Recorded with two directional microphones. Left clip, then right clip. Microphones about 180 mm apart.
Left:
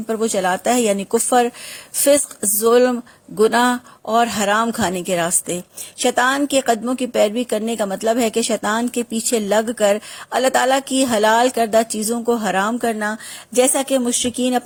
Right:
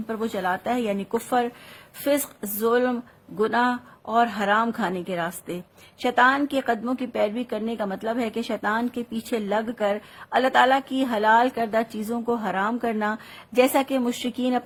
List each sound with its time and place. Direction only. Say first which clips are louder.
0.1 s speech: left 8 dB; 35° left (ahead or behind)